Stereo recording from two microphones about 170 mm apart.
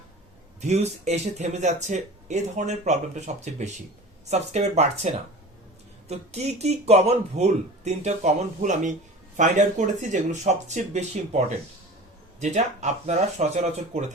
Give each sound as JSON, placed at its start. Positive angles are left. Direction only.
{"t": 0.6, "sound": "speech", "side_deg": -40}